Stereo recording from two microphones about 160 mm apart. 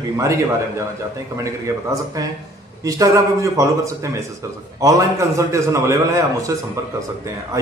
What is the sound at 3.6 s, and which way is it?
Speech, 20° right (ahead or behind).